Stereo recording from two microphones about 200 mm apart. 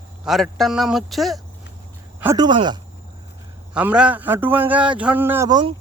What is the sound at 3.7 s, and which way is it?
A man's voice, 5° right (ahead or behind).